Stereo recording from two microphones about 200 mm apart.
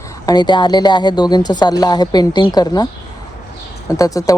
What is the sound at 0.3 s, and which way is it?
Speech, 20° left (ahead or behind).